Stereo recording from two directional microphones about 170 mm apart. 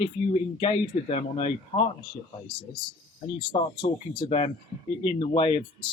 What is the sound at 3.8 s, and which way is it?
Speech, 30° left (ahead or behind).